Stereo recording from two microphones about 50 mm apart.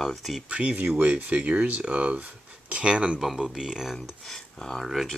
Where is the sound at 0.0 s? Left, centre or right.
Centre.